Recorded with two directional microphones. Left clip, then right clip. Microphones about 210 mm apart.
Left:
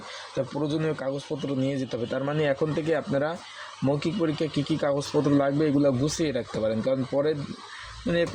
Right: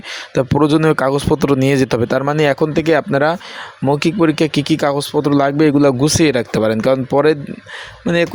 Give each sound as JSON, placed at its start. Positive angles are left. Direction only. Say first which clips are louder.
{"t": 0.3, "sound": "speech", "louder": "right 15 dB", "side_deg": -35}